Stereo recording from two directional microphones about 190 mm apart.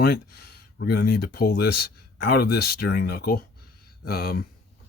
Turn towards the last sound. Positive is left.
turn(degrees=55)  # may be behind; listen again after turning